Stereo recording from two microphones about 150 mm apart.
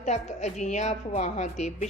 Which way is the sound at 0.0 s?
50° left (ahead or behind).